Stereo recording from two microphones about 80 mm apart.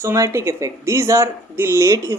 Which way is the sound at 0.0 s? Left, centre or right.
Right.